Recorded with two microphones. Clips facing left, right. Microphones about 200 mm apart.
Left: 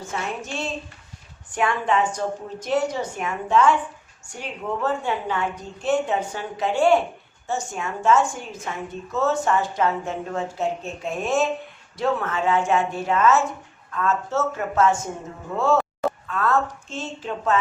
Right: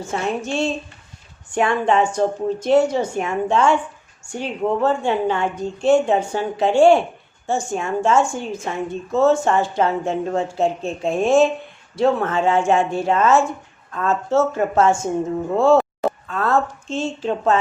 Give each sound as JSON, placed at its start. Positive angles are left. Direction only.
{"t": 0.0, "sound": "a woman's voice", "side_deg": -30}